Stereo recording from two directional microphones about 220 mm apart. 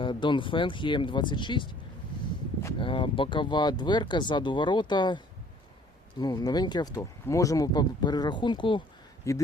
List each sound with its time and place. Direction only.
0.0 s speech: 20° left (ahead or behind)
2.7 s speech: 25° left (ahead or behind)